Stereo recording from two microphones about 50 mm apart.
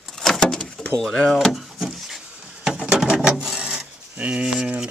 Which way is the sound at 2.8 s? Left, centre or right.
Centre.